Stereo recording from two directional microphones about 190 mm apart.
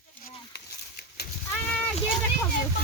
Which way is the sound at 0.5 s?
60° left (ahead or behind).